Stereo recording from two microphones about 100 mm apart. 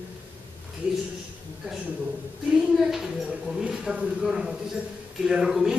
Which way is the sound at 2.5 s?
5° right (ahead or behind).